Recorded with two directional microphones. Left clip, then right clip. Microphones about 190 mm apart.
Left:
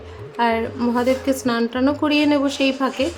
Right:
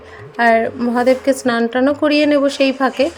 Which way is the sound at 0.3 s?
25° right (ahead or behind).